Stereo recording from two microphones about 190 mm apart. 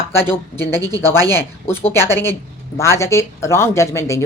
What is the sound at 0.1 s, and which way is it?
Speech, 10° left (ahead or behind).